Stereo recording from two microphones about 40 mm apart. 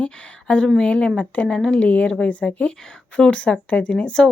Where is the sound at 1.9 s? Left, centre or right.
Left.